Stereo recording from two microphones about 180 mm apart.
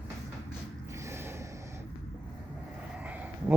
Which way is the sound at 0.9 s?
15° right (ahead or behind).